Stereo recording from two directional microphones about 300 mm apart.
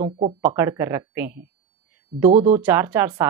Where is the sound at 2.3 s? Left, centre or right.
Right.